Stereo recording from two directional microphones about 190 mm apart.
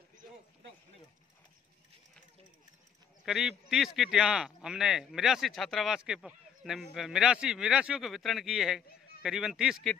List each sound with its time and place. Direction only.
3.3 s speech: centre (ahead or behind)